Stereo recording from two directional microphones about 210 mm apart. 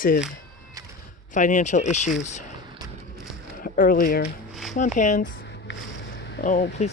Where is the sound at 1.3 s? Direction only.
35° left (ahead or behind).